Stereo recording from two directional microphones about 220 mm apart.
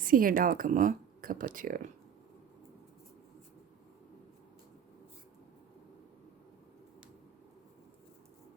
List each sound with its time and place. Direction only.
0.0 s speech: 40° right (ahead or behind)